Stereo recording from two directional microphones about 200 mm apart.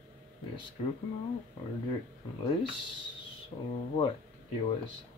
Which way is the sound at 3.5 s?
35° left (ahead or behind).